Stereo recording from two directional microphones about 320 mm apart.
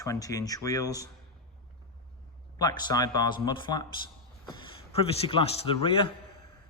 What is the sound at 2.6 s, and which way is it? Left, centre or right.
A man's voice, centre.